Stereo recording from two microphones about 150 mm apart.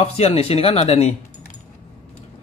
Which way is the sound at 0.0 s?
40° left (ahead or behind).